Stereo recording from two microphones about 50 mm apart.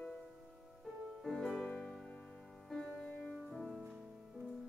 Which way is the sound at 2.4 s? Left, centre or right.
Centre.